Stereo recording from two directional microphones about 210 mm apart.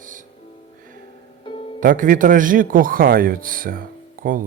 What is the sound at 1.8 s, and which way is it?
A man's voice, 40° right (ahead or behind).